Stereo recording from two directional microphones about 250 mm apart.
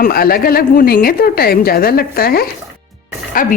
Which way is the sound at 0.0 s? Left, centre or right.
Left.